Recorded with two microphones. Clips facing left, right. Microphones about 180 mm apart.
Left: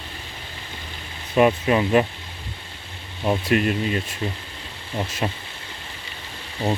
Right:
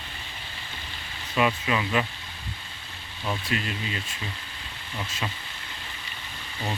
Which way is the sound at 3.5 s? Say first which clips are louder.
Left 10 dB; 50° left (ahead or behind).